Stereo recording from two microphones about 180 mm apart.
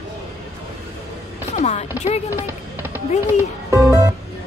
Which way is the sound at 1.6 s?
40° left (ahead or behind).